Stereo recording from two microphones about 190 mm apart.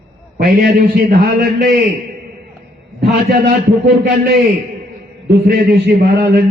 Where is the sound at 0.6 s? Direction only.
50° right (ahead or behind).